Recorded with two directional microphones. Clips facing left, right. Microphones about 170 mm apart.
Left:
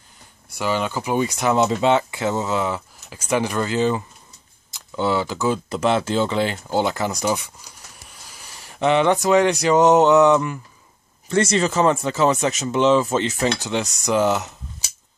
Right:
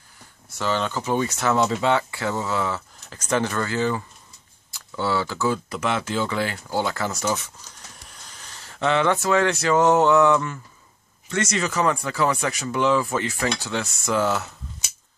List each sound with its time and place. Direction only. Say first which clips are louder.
0.5 s speech: left 2 dB; 10° left (ahead or behind)
5.8 s speech: left 5 dB; 30° left (ahead or behind)
11.2 s speech: left 6 dB; 30° left (ahead or behind)